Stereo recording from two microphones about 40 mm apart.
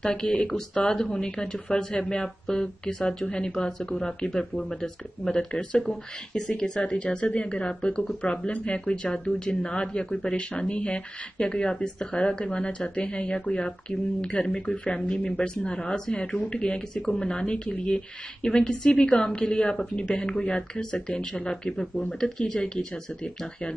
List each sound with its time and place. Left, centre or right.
0.0 s speech: centre
5.5 s speech: left
5.9 s speech: centre